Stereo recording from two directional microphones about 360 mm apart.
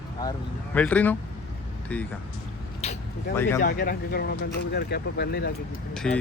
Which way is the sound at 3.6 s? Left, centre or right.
Left.